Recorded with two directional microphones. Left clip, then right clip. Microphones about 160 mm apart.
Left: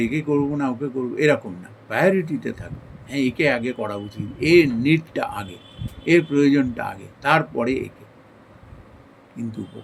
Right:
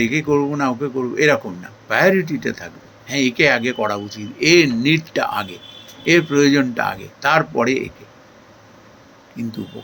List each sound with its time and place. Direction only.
0.0 s speech: 15° left (ahead or behind)